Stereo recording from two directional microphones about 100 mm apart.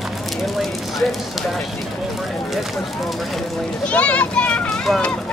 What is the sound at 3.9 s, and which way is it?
A child's voice, 15° left (ahead or behind).